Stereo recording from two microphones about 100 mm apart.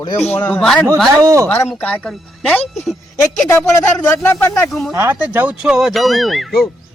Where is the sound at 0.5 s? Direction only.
5° left (ahead or behind).